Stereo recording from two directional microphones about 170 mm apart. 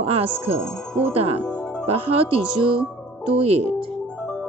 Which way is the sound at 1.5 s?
5° left (ahead or behind).